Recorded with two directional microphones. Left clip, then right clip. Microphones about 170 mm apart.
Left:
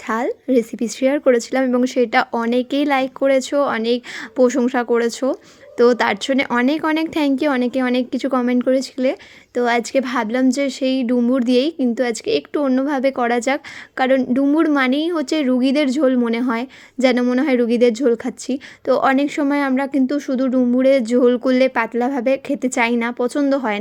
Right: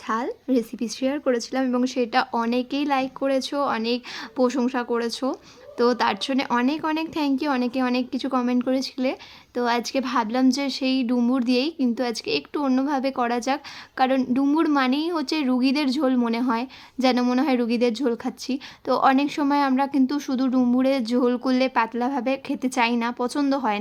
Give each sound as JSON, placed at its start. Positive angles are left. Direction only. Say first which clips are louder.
{"t": 0.1, "sound": "speech", "louder": "left 6 dB", "side_deg": 25}